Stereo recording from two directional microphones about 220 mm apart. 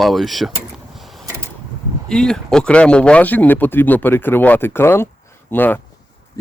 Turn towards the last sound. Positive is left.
turn(degrees=15)  # may be behind; listen again after turning